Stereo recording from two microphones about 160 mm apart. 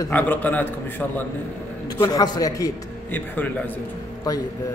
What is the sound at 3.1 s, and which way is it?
Speech, 10° left (ahead or behind).